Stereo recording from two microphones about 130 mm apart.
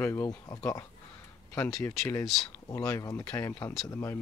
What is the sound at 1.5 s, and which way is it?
Speech, 10° left (ahead or behind).